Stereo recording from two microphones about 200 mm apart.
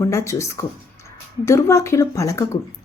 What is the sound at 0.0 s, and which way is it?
Speech, 15° left (ahead or behind).